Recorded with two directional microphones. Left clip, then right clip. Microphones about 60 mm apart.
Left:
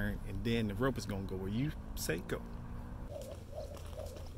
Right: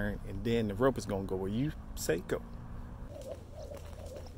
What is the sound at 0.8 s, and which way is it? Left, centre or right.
Speech, right.